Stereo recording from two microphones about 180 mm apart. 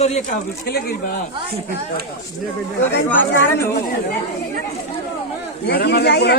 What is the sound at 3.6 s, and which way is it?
Speech, 55° left (ahead or behind).